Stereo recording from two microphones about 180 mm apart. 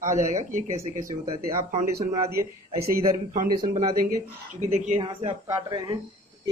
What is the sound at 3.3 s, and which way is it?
Speech, 50° right (ahead or behind).